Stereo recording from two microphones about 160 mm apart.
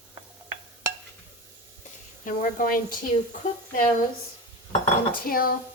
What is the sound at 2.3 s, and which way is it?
Speech, 60° left (ahead or behind).